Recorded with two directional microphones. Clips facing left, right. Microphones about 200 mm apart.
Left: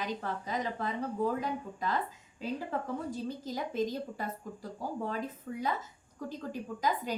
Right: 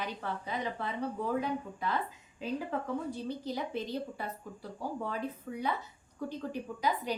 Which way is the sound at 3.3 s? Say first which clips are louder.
Right 1 dB; 45° left (ahead or behind).